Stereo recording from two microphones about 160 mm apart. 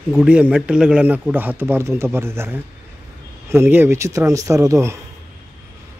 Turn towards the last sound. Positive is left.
turn(degrees=-20)  # may be behind; listen again after turning